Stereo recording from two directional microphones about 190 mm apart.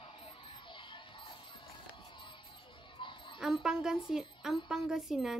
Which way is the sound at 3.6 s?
5° right (ahead or behind).